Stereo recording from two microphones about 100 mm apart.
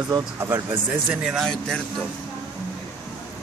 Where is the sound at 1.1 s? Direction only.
5° right (ahead or behind).